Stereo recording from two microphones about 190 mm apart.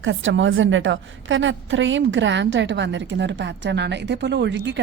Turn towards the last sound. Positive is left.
turn(degrees=-70)  # may be behind; listen again after turning